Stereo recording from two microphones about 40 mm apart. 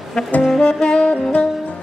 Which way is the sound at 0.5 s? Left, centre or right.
Left.